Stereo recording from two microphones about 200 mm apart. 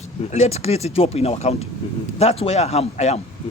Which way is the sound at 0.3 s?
35° left (ahead or behind).